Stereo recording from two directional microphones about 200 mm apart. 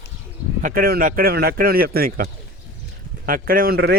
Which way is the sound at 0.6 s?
50° right (ahead or behind).